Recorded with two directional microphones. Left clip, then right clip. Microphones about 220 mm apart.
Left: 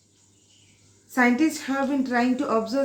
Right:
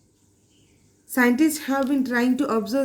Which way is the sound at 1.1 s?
50° right (ahead or behind).